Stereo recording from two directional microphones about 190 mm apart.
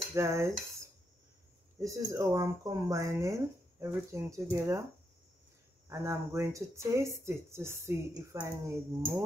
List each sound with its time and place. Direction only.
0.1 s cutlery: 15° right (ahead or behind)
1.8 s speech: 15° right (ahead or behind)
5.9 s speech: 15° right (ahead or behind)